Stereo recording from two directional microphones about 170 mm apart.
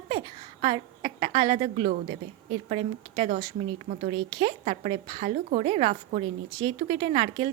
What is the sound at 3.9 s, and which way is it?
Speech, 65° right (ahead or behind).